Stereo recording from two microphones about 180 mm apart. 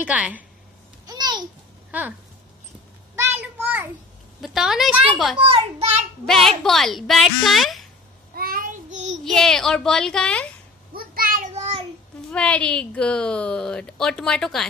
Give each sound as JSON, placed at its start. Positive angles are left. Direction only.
{"t": 0.0, "sound": "a woman's voice", "side_deg": -10}
{"t": 1.0, "sound": "babbling", "side_deg": -25}
{"t": 1.9, "sound": "speech", "side_deg": -10}
{"t": 3.2, "sound": "a sound", "side_deg": -10}
{"t": 4.4, "sound": "a woman's voice", "side_deg": 0}
{"t": 5.4, "sound": "a child's voice", "side_deg": -35}
{"t": 6.2, "sound": "a woman's voice", "side_deg": 0}
{"t": 8.4, "sound": "child singing", "side_deg": -55}
{"t": 9.2, "sound": "a woman's voice", "side_deg": 0}
{"t": 10.9, "sound": "child singing", "side_deg": -55}
{"t": 12.3, "sound": "a woman's voice", "side_deg": 5}